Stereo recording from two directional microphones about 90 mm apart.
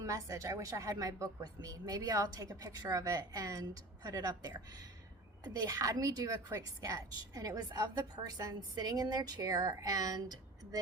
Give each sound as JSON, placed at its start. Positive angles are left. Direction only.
{"t": 0.0, "sound": "a woman's voice", "side_deg": -35}